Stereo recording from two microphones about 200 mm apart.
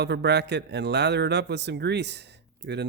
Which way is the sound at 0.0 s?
55° right (ahead or behind).